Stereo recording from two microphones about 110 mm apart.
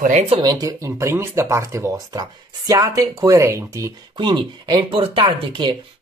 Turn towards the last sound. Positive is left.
turn(degrees=-45)  # may be behind; listen again after turning